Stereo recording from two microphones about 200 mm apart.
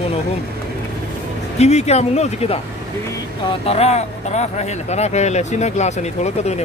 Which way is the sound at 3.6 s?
30° left (ahead or behind).